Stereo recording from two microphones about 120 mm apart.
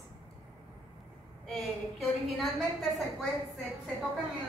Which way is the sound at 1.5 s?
Centre (ahead or behind).